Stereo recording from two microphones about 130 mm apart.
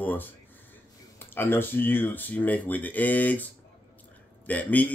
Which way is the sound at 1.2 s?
15° left (ahead or behind).